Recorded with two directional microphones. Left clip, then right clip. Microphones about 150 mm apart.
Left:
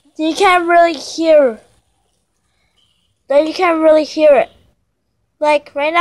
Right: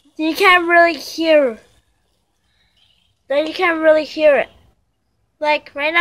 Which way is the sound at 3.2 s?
20° left (ahead or behind).